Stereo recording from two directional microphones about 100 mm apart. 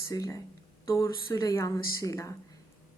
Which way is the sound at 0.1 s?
35° left (ahead or behind).